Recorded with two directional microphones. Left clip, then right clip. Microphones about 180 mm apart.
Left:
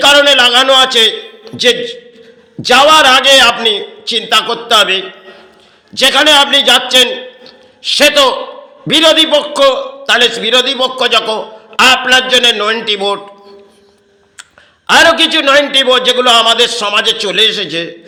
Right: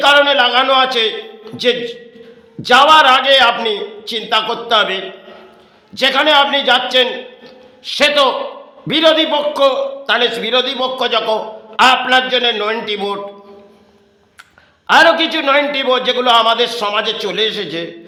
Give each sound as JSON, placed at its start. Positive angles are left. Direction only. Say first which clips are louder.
{"t": 0.0, "sound": "a man's voice", "louder": "left 4 dB", "side_deg": 20}
{"t": 14.8, "sound": "a man's voice", "louder": "left 3 dB", "side_deg": 20}